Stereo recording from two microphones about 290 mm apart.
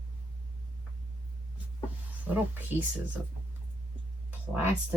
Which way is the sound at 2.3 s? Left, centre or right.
Centre.